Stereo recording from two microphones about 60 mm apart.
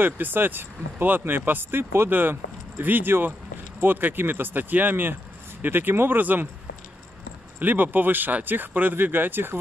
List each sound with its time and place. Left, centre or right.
0.0 s speech: right
7.5 s speech: right